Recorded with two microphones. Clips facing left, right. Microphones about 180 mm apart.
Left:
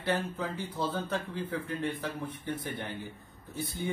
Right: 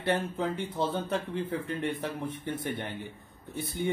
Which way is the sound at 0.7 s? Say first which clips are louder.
Right 1 dB; 25° right (ahead or behind).